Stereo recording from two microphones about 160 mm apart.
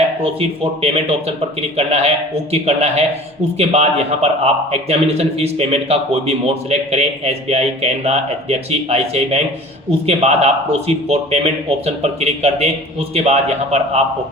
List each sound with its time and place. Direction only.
0.2 s a man's voice: 35° right (ahead or behind)